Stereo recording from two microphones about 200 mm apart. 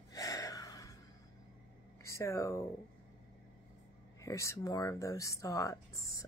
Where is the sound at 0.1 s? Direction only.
15° left (ahead or behind).